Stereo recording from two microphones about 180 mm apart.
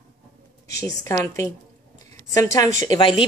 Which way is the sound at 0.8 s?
15° left (ahead or behind).